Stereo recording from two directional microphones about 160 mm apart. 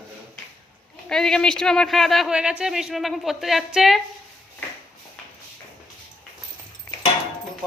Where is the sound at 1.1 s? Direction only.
5° left (ahead or behind).